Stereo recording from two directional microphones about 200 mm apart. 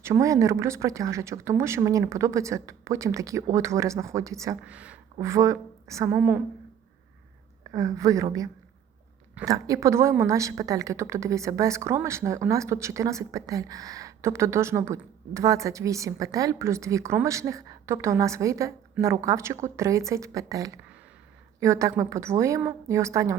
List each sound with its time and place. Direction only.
0.0 s a woman's voice: 15° right (ahead or behind)
7.7 s a woman's voice: 15° right (ahead or behind)